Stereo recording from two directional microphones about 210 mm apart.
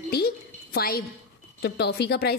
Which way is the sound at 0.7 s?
45° left (ahead or behind).